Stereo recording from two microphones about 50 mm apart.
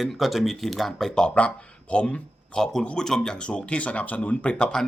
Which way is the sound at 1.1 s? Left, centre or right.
Centre.